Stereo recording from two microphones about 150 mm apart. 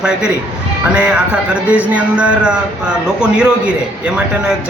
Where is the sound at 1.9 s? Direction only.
10° right (ahead or behind).